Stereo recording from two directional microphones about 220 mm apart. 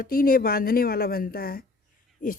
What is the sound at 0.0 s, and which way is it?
Speech, 40° left (ahead or behind).